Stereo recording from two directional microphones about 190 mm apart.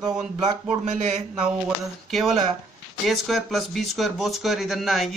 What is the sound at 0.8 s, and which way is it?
Speech, 40° right (ahead or behind).